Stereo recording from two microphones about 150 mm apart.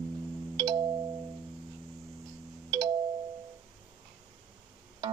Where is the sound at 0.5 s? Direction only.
30° right (ahead or behind).